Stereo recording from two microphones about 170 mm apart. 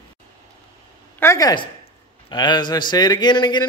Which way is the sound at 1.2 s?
20° left (ahead or behind).